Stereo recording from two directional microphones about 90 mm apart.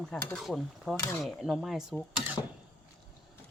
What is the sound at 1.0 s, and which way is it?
Speech, 35° left (ahead or behind).